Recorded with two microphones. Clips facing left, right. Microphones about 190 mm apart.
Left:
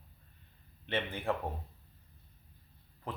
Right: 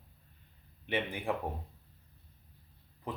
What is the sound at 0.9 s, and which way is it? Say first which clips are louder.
Speech: right 1 dB; 15° right (ahead or behind).